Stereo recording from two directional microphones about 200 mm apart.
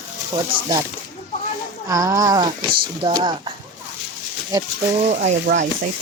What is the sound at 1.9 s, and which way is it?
Speech, 15° right (ahead or behind).